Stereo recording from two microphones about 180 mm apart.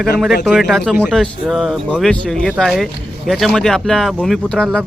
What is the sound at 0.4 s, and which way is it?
Speech, centre (ahead or behind).